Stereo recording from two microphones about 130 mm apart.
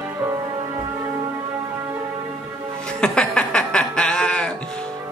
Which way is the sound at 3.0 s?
5° left (ahead or behind).